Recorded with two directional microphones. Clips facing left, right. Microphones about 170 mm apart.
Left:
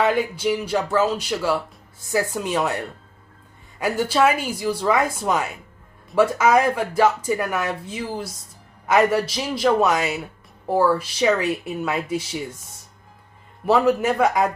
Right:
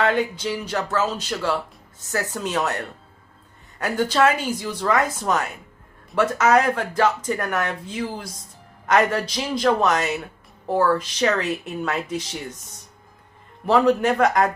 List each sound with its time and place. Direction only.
0.0 s speech: 10° left (ahead or behind)
13.7 s speech: 5° left (ahead or behind)